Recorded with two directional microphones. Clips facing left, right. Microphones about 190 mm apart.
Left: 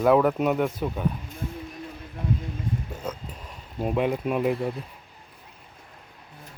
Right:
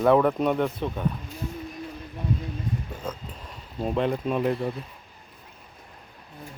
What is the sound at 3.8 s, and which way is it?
Speech, 10° left (ahead or behind).